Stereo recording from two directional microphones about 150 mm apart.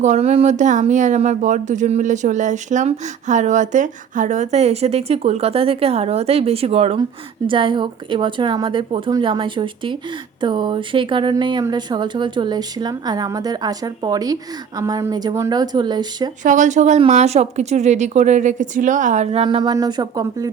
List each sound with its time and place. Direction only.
0.0 s a woman's voice: 50° right (ahead or behind); by 16.3 s 30° right (ahead or behind)
16.4 s speech: 55° right (ahead or behind); by 20.5 s 25° right (ahead or behind)